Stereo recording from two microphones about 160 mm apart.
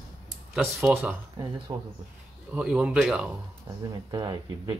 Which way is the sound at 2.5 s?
5° right (ahead or behind).